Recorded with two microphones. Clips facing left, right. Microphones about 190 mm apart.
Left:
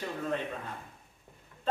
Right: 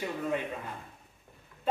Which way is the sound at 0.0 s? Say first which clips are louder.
Right 1 dB; 10° right (ahead or behind).